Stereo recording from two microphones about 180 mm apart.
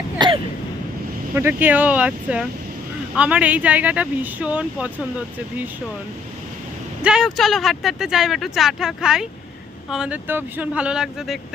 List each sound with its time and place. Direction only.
0.2 s a sound: 25° right (ahead or behind)
1.4 s speech: 10° right (ahead or behind)
7.0 s speech: centre (ahead or behind)